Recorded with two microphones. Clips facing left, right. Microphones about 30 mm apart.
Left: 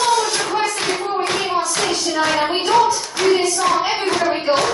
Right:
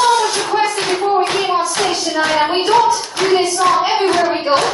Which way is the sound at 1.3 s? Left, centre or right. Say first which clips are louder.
Right 3 dB; centre.